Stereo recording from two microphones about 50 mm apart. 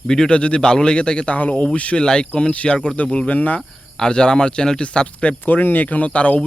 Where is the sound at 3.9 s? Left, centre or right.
Centre.